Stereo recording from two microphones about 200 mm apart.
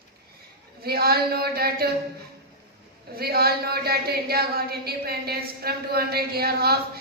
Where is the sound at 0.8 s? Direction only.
50° right (ahead or behind).